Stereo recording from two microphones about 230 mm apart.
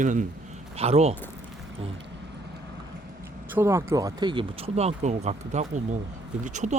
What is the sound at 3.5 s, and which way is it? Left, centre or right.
Speech, centre.